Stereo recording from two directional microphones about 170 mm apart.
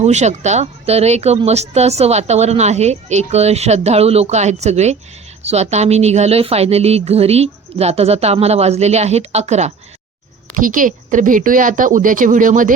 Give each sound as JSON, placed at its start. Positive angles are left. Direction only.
{"t": 0.0, "sound": "a woman's voice", "side_deg": -40}
{"t": 10.5, "sound": "speech", "side_deg": -55}